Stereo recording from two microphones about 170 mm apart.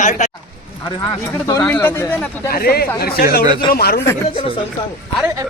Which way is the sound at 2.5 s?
65° left (ahead or behind).